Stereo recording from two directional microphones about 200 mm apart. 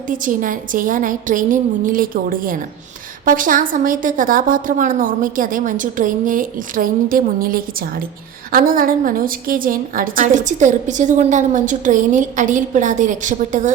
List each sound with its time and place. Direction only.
0.1 s a woman's voice: 40° right (ahead or behind)